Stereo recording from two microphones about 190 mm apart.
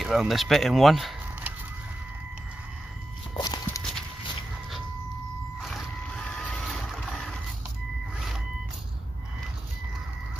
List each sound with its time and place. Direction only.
0.0 s speech: centre (ahead or behind)
3.3 s walk: 20° left (ahead or behind)
5.6 s boat: centre (ahead or behind)